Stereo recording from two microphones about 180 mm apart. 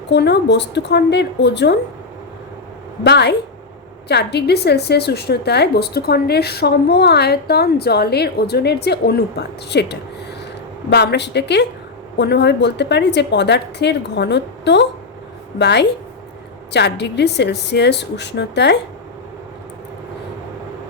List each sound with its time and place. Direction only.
0.1 s a woman's voice: 70° left (ahead or behind)
3.0 s a woman's voice: 70° left (ahead or behind)